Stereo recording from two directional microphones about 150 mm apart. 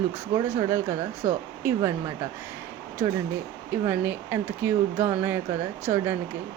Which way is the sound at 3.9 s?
15° right (ahead or behind).